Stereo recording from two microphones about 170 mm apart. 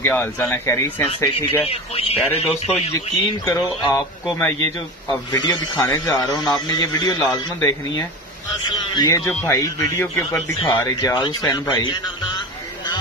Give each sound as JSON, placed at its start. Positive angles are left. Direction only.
{"t": 0.0, "sound": "speech", "side_deg": 10}
{"t": 1.6, "sound": "speech", "side_deg": 35}
{"t": 2.9, "sound": "speech", "side_deg": 20}
{"t": 9.2, "sound": "speech", "side_deg": 10}